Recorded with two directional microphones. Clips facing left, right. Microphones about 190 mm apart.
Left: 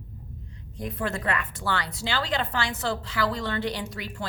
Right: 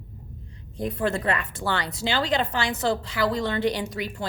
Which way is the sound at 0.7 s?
30° right (ahead or behind).